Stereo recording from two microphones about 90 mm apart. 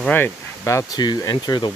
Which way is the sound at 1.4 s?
50° left (ahead or behind).